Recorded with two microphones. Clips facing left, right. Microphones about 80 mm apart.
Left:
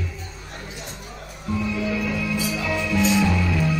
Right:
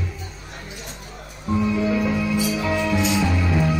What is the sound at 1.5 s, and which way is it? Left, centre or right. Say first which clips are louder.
Music: right 4 dB; right.